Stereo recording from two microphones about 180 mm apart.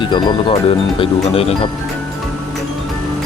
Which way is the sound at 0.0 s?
25° left (ahead or behind).